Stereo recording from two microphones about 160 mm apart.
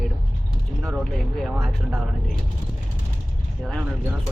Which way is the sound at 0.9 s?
Centre (ahead or behind).